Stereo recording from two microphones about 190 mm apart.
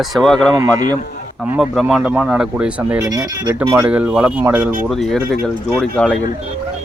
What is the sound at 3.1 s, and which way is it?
Speech, 20° right (ahead or behind).